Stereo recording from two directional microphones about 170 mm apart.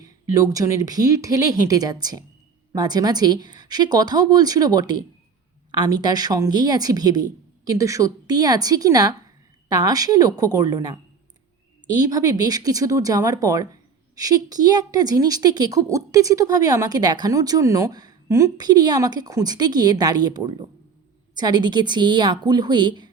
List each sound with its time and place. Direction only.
0.5 s a woman's voice: 20° right (ahead or behind)
11.9 s a woman's voice: 20° right (ahead or behind)